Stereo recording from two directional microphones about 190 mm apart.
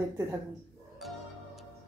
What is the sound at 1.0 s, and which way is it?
Music, centre (ahead or behind).